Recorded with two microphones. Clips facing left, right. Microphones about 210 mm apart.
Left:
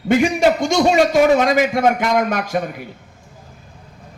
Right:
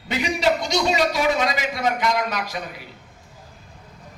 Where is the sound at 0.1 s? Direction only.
50° left (ahead or behind).